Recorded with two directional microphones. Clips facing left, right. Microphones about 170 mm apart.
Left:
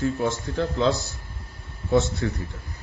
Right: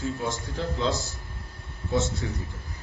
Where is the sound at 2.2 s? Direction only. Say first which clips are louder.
Left 6 dB; 65° left (ahead or behind).